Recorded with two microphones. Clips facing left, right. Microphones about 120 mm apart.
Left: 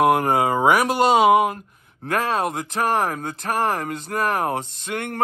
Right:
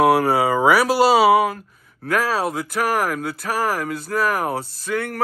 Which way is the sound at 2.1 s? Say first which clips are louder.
Right 1 dB; 25° left (ahead or behind).